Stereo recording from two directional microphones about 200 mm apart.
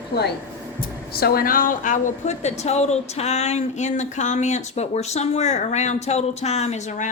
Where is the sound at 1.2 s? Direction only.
45° left (ahead or behind).